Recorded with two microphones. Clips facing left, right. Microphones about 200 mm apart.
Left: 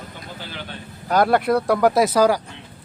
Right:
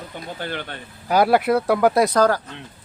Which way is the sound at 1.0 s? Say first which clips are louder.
Right 1 dB; 5° right (ahead or behind).